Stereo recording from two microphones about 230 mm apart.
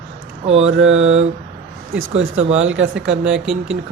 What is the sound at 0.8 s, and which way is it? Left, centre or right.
Speech, right.